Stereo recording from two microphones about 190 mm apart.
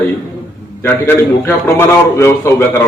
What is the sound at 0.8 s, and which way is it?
A man's voice, 10° left (ahead or behind).